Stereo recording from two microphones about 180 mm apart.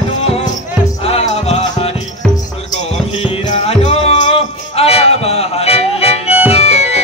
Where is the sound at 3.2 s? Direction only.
35° left (ahead or behind).